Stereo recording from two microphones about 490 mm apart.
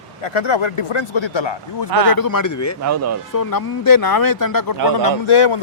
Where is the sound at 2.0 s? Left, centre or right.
Left.